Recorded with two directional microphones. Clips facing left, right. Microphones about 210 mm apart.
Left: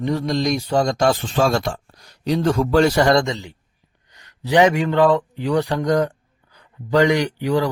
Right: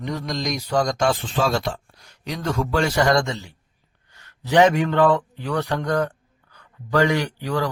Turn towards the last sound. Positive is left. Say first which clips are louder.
# left 5 dB
turn(degrees=15)  # may be behind; listen again after turning